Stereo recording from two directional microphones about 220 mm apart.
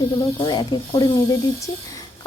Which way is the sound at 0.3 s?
20° left (ahead or behind).